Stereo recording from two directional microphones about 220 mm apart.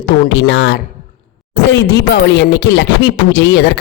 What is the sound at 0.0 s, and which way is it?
Speech, 55° left (ahead or behind).